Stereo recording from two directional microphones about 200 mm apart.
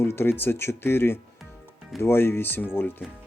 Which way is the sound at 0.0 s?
10° left (ahead or behind).